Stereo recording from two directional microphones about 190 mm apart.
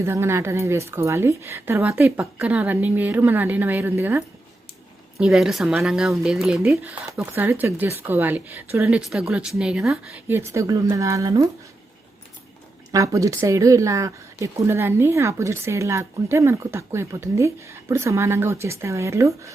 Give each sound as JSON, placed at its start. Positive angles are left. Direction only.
{"t": 0.0, "sound": "a woman's voice", "side_deg": -15}
{"t": 5.2, "sound": "a woman's voice", "side_deg": -5}
{"t": 12.9, "sound": "a woman's voice", "side_deg": -15}